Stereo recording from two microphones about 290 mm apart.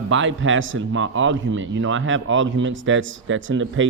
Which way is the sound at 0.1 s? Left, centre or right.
Right.